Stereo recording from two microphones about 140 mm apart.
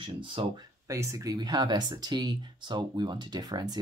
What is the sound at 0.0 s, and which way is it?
Speech, 35° right (ahead or behind).